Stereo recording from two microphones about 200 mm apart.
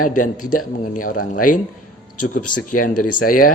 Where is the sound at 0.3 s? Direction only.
90° left.